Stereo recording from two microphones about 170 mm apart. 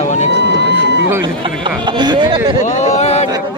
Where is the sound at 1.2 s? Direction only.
25° right (ahead or behind).